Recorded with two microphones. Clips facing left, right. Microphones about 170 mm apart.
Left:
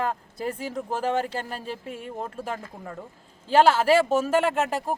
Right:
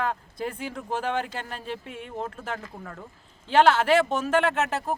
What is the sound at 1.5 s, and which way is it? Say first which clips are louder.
Speech: left 1 dB; 5° left (ahead or behind).